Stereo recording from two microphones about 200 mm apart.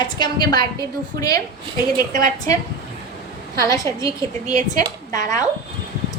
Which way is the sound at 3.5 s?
15° left (ahead or behind).